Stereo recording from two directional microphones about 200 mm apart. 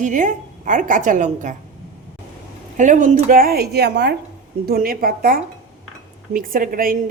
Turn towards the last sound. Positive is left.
turn(degrees=-45)  # may be behind; listen again after turning